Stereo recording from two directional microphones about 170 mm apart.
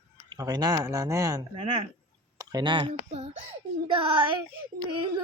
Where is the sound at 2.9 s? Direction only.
40° right (ahead or behind).